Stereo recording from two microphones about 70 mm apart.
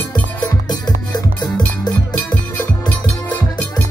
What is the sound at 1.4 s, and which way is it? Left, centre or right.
Music, left.